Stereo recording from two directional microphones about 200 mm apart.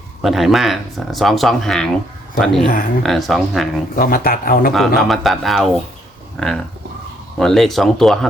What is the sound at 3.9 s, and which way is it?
Speech, 45° left (ahead or behind).